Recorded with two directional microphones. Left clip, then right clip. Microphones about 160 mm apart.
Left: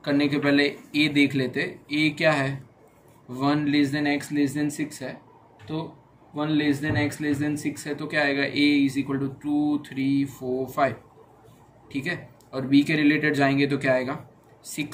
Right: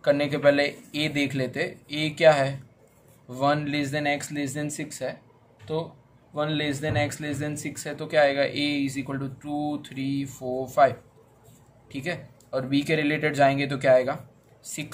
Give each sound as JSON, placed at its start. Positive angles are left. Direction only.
{"t": 0.0, "sound": "speech", "side_deg": -45}
{"t": 6.3, "sound": "speech", "side_deg": -45}